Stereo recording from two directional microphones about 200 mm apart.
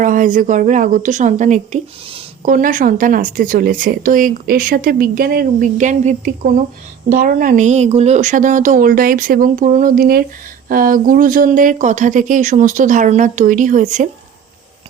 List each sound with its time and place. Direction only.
0.0 s a woman's voice: 40° right (ahead or behind)